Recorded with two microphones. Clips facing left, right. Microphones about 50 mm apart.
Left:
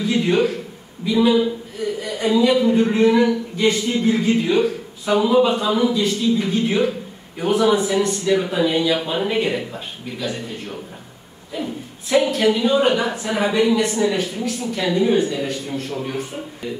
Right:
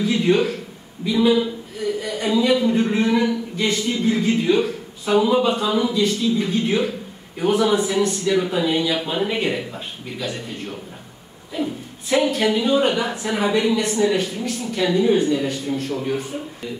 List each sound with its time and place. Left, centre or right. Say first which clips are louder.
0.0 s a man's voice: even; centre